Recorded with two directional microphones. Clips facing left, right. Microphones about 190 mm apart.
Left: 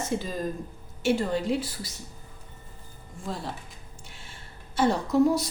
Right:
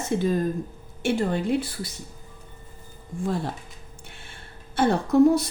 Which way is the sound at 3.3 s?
55° right (ahead or behind).